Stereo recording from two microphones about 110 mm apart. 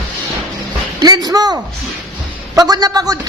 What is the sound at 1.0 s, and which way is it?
A man's voice, 35° right (ahead or behind).